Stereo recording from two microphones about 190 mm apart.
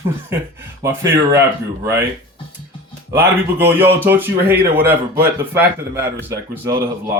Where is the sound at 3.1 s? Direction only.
10° right (ahead or behind).